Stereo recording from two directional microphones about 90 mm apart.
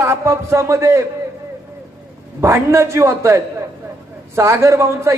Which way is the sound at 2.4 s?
30° right (ahead or behind).